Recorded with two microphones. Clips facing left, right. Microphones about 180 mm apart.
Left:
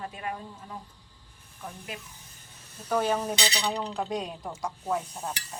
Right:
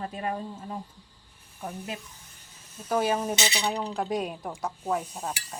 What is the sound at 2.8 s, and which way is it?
Cutlery, 10° right (ahead or behind).